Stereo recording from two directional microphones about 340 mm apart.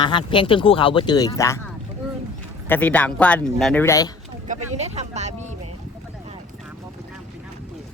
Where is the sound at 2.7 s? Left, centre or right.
Centre.